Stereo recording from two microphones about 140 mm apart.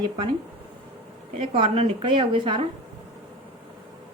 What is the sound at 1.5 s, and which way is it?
Speech, 40° right (ahead or behind).